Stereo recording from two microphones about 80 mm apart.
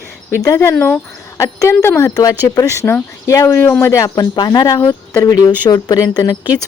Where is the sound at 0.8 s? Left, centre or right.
Left.